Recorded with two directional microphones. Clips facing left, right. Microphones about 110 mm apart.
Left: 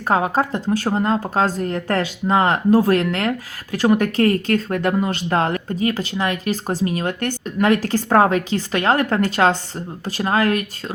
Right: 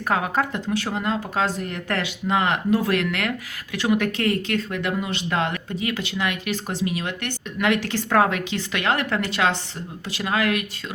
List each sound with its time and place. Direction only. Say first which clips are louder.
0.1 s speech: left 5 dB; 30° left (ahead or behind)